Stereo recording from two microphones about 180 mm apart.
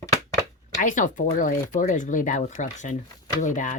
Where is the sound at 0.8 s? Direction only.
45° left (ahead or behind).